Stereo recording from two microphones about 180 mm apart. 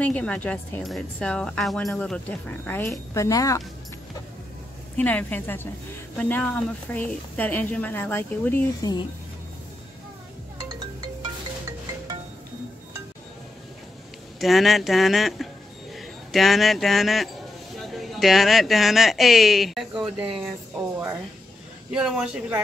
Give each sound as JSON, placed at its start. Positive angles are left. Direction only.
{"t": 0.0, "sound": "a woman's voice", "side_deg": 5}
{"t": 4.9, "sound": "a woman's voice", "side_deg": 10}
{"t": 14.4, "sound": "speech", "side_deg": 0}
{"t": 21.9, "sound": "speech", "side_deg": -5}